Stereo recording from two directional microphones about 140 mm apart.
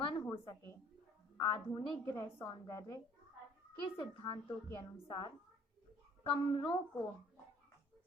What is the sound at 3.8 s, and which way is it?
A woman's voice, 40° left (ahead or behind).